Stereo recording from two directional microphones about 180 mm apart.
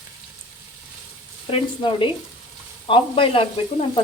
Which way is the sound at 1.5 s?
30° left (ahead or behind).